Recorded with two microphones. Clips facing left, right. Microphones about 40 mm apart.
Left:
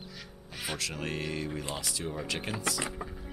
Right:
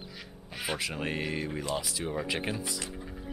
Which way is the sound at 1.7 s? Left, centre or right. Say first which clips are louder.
Right 3 dB; centre.